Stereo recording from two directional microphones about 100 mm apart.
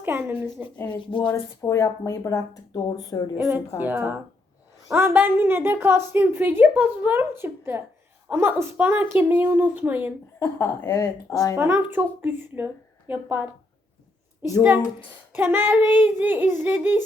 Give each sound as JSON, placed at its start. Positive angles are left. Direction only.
{"t": 0.0, "sound": "a sound", "side_deg": -20}
{"t": 0.9, "sound": "speech", "side_deg": 55}
{"t": 1.3, "sound": "speech", "side_deg": 30}
{"t": 3.8, "sound": "a woman's voice", "side_deg": -20}
{"t": 10.4, "sound": "speech", "side_deg": 25}
{"t": 10.9, "sound": "speech", "side_deg": 35}
{"t": 11.5, "sound": "a woman's voice", "side_deg": -20}
{"t": 15.3, "sound": "child singing", "side_deg": -20}
{"t": 16.0, "sound": "speech", "side_deg": -15}